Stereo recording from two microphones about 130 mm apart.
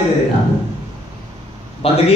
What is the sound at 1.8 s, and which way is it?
Speech, 50° left (ahead or behind).